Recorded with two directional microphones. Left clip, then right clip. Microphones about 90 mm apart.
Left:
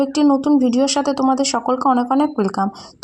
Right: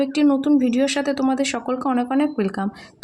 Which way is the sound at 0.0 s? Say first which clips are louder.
Left 3 dB; 30° left (ahead or behind).